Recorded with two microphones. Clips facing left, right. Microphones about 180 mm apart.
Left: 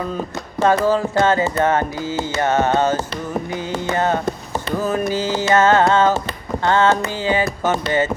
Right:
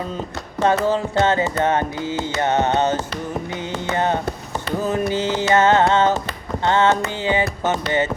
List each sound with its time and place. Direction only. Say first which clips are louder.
0.6 s music: left 2 dB; 20° right (ahead or behind)